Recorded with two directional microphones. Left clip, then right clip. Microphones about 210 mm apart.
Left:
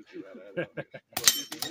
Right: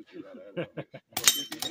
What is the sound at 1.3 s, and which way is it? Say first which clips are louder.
Chink: even; 15° left (ahead or behind).